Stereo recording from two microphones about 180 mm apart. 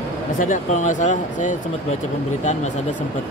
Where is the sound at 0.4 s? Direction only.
45° left (ahead or behind).